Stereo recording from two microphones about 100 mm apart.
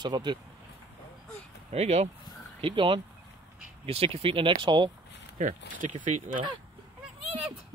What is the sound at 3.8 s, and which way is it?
Speech, 80° right.